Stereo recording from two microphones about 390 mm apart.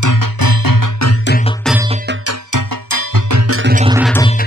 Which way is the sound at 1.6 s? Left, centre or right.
Centre.